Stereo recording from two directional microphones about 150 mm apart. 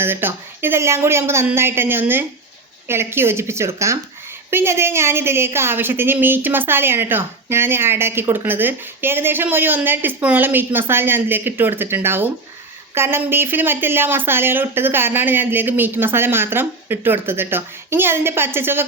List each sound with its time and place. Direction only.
0.0 s a woman's voice: 15° right (ahead or behind)